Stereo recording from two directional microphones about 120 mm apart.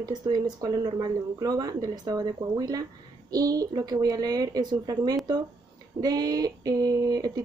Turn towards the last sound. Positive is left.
turn(degrees=-30)  # may be behind; listen again after turning